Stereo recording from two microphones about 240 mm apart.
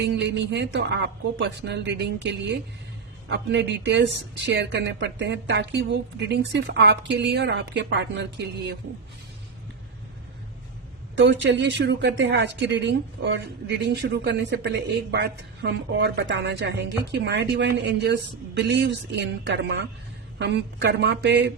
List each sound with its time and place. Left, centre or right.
0.1 s speech: right
11.1 s speech: right